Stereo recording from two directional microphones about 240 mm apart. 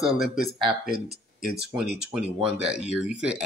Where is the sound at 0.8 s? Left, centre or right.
Right.